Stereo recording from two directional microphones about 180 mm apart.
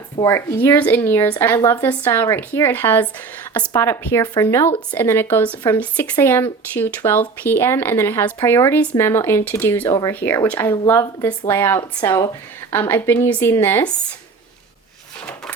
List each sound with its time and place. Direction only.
0.2 s speech: 15° left (ahead or behind)
9.9 s speech: 20° left (ahead or behind)